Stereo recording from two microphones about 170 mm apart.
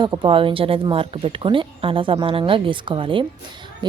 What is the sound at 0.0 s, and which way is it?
Speech, 25° right (ahead or behind).